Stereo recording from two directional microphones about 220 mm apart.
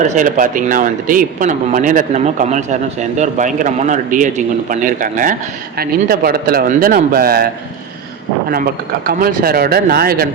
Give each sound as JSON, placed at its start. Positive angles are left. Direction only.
{"t": 0.1, "sound": "speech", "side_deg": -35}
{"t": 9.0, "sound": "speech", "side_deg": -40}